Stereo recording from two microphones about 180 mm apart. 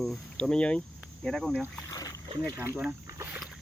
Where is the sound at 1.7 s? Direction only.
20° left (ahead or behind).